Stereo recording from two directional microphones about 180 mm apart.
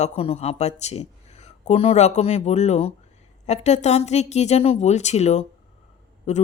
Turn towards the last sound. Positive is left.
turn(degrees=40)  # may be behind; listen again after turning